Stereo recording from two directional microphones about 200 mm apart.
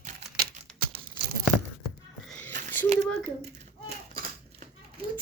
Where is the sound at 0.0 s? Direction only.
40° right (ahead or behind).